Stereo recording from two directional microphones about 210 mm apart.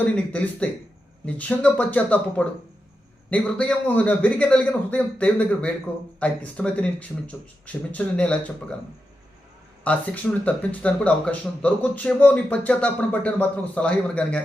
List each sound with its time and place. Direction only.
0.0 s speech: 5° left (ahead or behind)
9.9 s speech: 5° left (ahead or behind)